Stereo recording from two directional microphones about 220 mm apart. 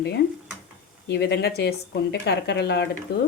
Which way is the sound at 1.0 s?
50° left (ahead or behind).